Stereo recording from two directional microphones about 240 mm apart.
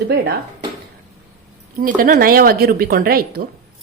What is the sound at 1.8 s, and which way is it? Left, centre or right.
Speech, right.